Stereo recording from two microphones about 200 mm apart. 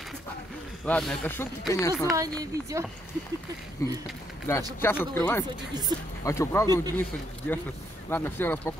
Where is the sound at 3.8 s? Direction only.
15° left (ahead or behind).